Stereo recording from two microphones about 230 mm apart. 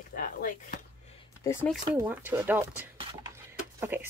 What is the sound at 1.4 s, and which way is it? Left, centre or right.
Speech, centre.